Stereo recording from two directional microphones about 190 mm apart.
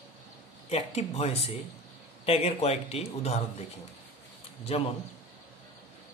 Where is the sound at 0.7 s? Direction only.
35° left (ahead or behind).